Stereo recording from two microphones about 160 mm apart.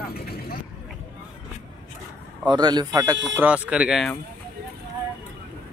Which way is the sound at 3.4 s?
10° right (ahead or behind).